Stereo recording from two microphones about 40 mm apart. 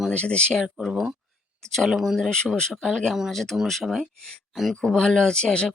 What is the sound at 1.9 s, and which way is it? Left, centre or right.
Speech, centre.